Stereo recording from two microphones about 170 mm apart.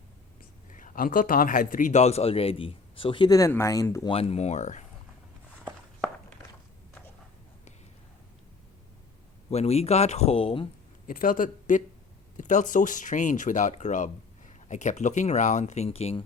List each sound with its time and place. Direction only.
0.7 s a man's voice: 50° left (ahead or behind); by 4.1 s 20° left (ahead or behind)
4.1 s a man's voice: 35° left (ahead or behind)
9.5 s a man's voice: 40° left (ahead or behind)
11.0 s speech: 55° left (ahead or behind); by 16.2 s 35° left (ahead or behind)